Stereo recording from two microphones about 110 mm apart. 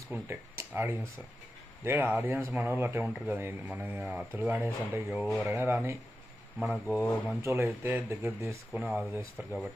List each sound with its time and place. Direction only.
0.1 s speech: 20° right (ahead or behind)